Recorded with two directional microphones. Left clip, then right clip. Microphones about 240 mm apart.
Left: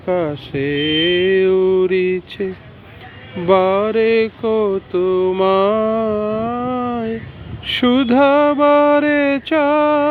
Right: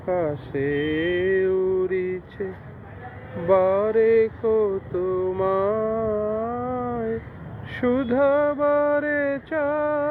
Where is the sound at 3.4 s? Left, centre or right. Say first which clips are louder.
Left 5 dB; left.